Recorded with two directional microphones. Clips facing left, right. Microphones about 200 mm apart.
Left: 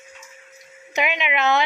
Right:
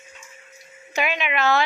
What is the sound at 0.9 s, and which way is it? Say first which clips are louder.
Speech: left 1 dB; 20° left (ahead or behind).